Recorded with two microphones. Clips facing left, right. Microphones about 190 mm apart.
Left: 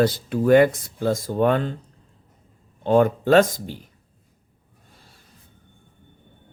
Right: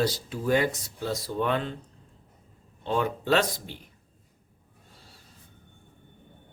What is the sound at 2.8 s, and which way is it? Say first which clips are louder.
Speech: left 10 dB; 50° left (ahead or behind).